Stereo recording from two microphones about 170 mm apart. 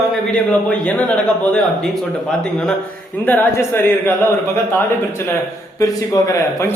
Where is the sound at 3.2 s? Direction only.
10° left (ahead or behind).